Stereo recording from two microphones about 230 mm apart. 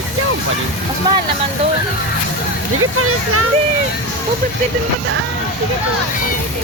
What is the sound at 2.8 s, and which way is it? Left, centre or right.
Speech, right.